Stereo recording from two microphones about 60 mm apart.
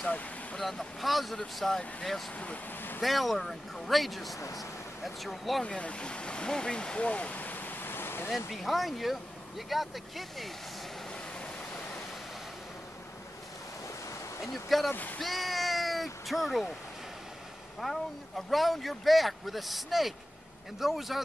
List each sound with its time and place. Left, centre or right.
0.0 s speech: left
0.6 s speech: centre
2.3 s speech: left
3.0 s speech: centre
4.4 s speech: left
5.0 s speech: centre
5.6 s speech: centre; by 8.3 s left
8.5 s speech: centre
11.4 s waterfall: left
14.4 s speech: centre
14.9 s speech: left
15.1 s a sound: centre
17.7 s speech: centre